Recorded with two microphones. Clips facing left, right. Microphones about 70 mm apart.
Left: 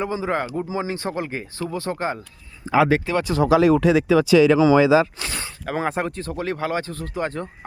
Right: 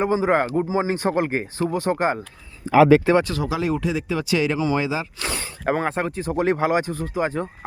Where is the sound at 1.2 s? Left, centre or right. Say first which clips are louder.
Right 5 dB; right.